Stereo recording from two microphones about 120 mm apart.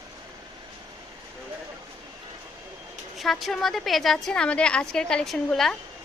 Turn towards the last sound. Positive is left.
turn(degrees=0)  # may be behind; listen again after turning